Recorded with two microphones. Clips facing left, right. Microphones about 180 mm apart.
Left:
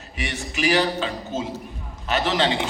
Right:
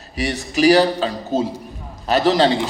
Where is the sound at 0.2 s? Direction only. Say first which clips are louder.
Right 9 dB; 35° right (ahead or behind).